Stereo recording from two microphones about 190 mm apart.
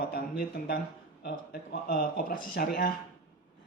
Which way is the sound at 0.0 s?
55° left (ahead or behind).